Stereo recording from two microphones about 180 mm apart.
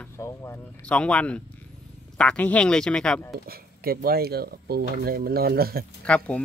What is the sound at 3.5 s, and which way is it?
Speech, 55° right (ahead or behind).